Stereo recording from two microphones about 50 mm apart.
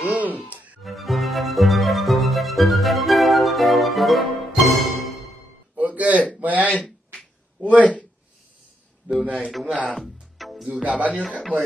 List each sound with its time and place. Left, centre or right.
0.0 s music: right
0.8 s music: centre
5.8 s a sound: right
7.6 s speech: right
9.1 s a sound: right
9.5 s speech: centre
9.8 s music: centre
10.8 s speech: right